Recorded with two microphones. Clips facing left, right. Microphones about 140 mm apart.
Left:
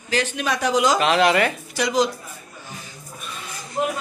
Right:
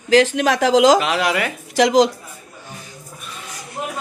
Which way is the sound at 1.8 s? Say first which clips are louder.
Right 7 dB; 90° right.